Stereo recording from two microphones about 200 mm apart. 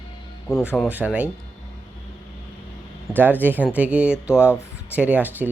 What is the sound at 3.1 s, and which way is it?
Speech, 10° right (ahead or behind).